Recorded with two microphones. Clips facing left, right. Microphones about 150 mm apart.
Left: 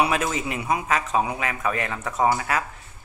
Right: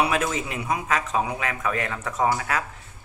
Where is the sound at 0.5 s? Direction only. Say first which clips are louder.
Left 2 dB; 10° left (ahead or behind).